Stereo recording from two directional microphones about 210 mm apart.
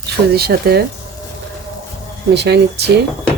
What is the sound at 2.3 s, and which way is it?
Speech, 55° right (ahead or behind).